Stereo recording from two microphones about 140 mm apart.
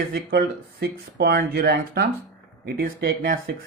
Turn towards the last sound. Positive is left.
turn(degrees=-90)